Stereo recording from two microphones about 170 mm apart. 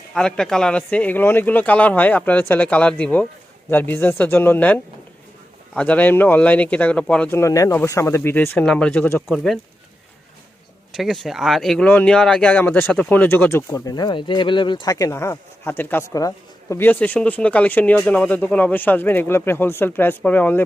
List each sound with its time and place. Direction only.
0.1 s speech: 5° left (ahead or behind)
9.2 s speech: centre (ahead or behind)
10.9 s speech: centre (ahead or behind)